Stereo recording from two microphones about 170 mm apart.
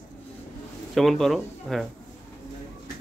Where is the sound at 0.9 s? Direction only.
Centre (ahead or behind).